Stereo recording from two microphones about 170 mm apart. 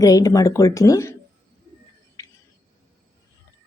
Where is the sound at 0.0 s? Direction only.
20° left (ahead or behind).